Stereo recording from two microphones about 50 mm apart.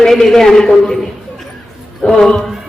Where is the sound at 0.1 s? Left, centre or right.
Centre.